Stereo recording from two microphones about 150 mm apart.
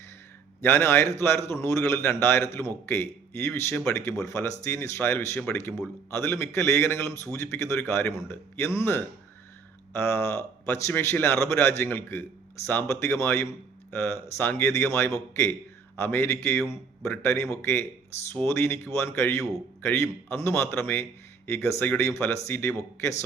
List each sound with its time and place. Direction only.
0.6 s a man's voice: 15° left (ahead or behind)